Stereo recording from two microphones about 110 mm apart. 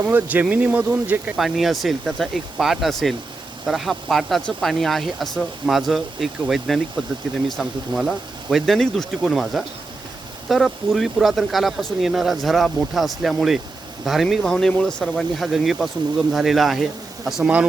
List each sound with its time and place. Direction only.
0.0 s speech: 15° right (ahead or behind)
1.4 s speech: centre (ahead or behind)